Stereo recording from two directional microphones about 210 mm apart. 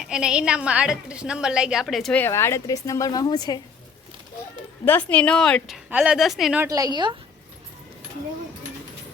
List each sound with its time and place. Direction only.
0.0 s a woman's voice: 5° right (ahead or behind); by 3.6 s 20° left (ahead or behind)
4.9 s a woman's voice: 5° left (ahead or behind)
6.7 s a woman's voice: 15° right (ahead or behind)